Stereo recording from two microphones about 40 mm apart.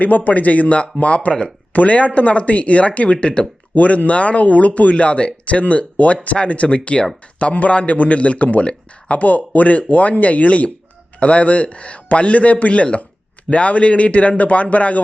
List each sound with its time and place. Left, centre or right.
0.3 s a man's voice: left